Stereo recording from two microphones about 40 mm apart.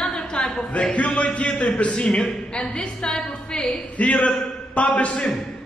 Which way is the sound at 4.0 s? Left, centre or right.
Left.